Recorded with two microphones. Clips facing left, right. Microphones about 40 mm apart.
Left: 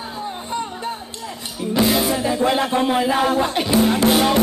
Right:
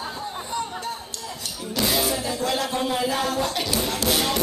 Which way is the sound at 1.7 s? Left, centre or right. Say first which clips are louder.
Left 6 dB; centre.